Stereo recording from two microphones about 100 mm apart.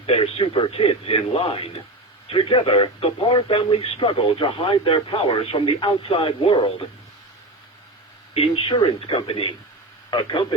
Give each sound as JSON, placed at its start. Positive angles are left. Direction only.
{"t": 0.0, "sound": "a man's voice", "side_deg": 75}
{"t": 8.3, "sound": "speech", "side_deg": 70}
{"t": 10.1, "sound": "speech", "side_deg": 50}